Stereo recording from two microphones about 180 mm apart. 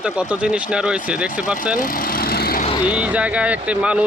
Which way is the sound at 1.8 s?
50° left (ahead or behind).